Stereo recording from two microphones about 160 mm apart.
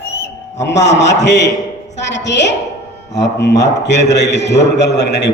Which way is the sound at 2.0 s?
90° left.